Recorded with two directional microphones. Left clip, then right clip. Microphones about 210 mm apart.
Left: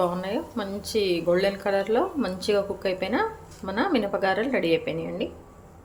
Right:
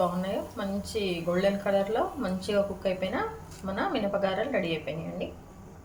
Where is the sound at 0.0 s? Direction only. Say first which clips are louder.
Left 3 dB; 40° left (ahead or behind).